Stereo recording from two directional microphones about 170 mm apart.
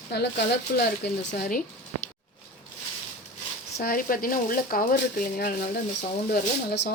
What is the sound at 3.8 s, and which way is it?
Speech, 55° left (ahead or behind).